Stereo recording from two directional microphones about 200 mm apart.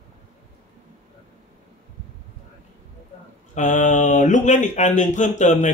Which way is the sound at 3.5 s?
40° left (ahead or behind).